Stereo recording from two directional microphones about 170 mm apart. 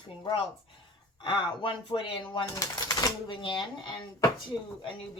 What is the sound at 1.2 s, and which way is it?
Speech, 30° left (ahead or behind).